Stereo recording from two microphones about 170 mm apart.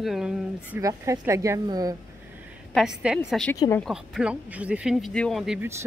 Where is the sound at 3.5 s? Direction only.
20° left (ahead or behind).